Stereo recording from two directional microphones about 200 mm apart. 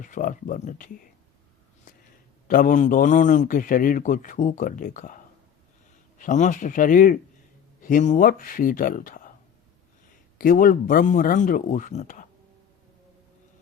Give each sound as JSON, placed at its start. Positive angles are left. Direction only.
{"t": 0.0, "sound": "a man's voice", "side_deg": 40}
{"t": 2.5, "sound": "a man's voice", "side_deg": 40}
{"t": 10.3, "sound": "a man's voice", "side_deg": 45}